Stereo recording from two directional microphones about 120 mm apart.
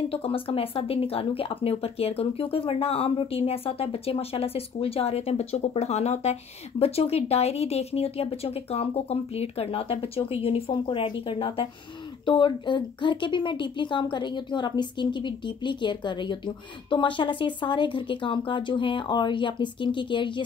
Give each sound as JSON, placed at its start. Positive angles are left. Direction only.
{"t": 0.1, "sound": "speech", "side_deg": 50}